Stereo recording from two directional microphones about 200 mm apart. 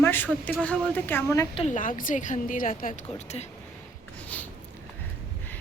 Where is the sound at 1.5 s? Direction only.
35° left (ahead or behind).